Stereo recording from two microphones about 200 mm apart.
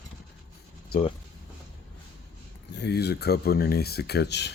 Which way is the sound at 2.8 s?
55° left (ahead or behind).